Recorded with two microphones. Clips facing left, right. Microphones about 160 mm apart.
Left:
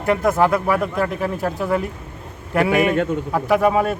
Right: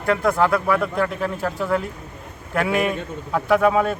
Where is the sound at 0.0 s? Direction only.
15° left (ahead or behind).